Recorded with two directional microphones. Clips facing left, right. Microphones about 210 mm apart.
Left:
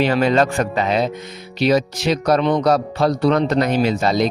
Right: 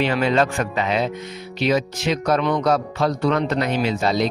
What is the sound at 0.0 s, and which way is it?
Speech, 40° left (ahead or behind).